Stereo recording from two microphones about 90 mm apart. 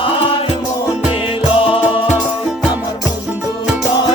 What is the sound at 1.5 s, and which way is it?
Music, 90° left.